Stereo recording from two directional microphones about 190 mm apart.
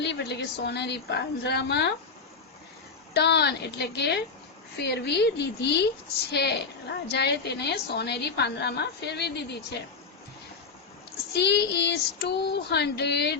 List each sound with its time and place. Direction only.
0.0 s a woman's voice: 60° left (ahead or behind)
3.2 s a woman's voice: 60° left (ahead or behind)
11.3 s a woman's voice: 60° left (ahead or behind)